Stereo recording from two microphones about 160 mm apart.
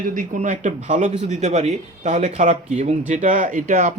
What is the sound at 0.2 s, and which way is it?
Speech, 50° right (ahead or behind).